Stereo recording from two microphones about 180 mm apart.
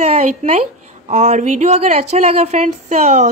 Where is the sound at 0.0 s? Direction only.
35° right (ahead or behind).